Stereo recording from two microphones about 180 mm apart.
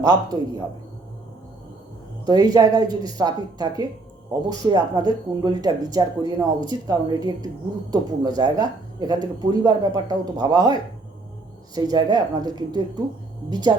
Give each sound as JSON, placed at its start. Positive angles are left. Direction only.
{"t": 0.0, "sound": "speech", "side_deg": -20}
{"t": 2.2, "sound": "speech", "side_deg": -20}